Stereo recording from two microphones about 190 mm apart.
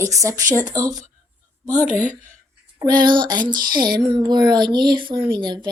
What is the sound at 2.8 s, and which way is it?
Speech, 20° right (ahead or behind).